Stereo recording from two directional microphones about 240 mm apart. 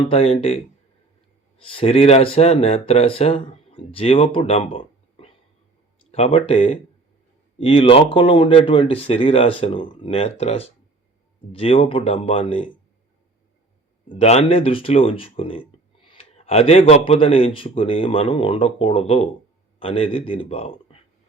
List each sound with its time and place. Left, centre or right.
0.0 s speech: left
14.1 s speech: left